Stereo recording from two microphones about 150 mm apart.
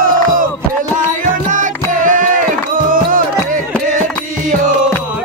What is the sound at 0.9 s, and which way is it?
Music, 60° right (ahead or behind).